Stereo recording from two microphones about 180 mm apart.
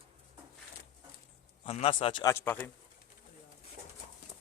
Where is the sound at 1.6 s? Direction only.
35° left (ahead or behind).